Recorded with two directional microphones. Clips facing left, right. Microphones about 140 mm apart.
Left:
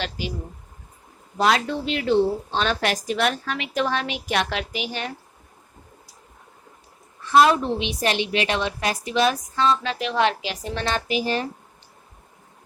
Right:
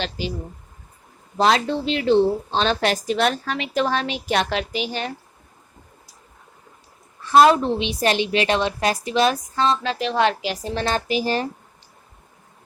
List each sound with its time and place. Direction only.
0.0 s speech: 30° right (ahead or behind)
1.4 s a woman's voice: 30° right (ahead or behind)
7.3 s a woman's voice: 35° right (ahead or behind)